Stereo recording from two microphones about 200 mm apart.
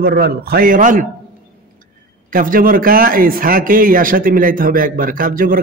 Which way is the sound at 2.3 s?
45° right (ahead or behind).